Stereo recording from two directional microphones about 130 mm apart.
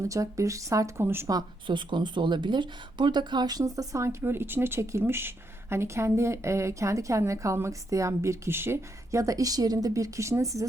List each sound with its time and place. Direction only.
0.0 s speech: 25° right (ahead or behind)